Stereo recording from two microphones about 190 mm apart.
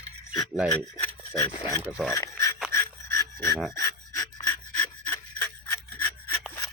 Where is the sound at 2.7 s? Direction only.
15° left (ahead or behind).